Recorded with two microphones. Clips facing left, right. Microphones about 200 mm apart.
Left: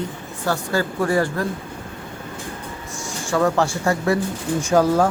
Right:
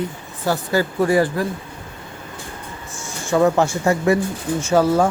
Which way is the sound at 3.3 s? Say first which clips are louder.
Right 3 dB; 20° right (ahead or behind).